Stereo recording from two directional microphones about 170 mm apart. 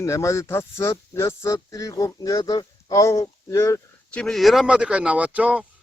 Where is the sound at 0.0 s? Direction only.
15° left (ahead or behind).